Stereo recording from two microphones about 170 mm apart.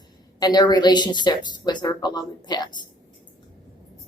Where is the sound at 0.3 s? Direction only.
25° left (ahead or behind).